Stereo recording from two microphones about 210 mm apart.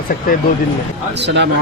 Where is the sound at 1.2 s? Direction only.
55° right (ahead or behind).